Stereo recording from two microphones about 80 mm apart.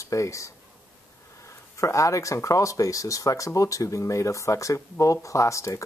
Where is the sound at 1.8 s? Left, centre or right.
Left.